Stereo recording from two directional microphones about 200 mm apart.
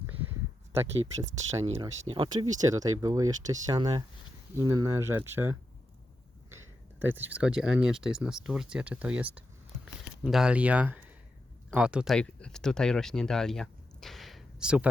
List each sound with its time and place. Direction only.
0.8 s speech: 15° right (ahead or behind)
1.8 s speech: 25° right (ahead or behind)
7.0 s speech: 10° right (ahead or behind)